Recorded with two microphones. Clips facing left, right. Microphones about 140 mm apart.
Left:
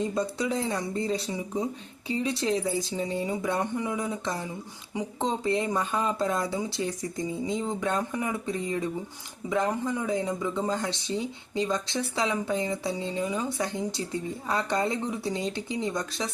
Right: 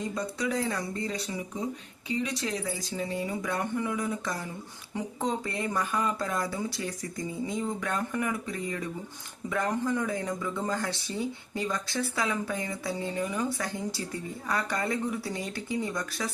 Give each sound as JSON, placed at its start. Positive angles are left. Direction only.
{"t": 0.0, "sound": "speech", "side_deg": 30}